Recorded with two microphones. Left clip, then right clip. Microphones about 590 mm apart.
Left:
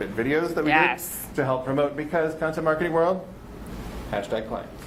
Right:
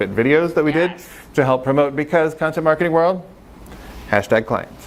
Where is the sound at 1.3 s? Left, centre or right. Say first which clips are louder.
Right 9 dB; right.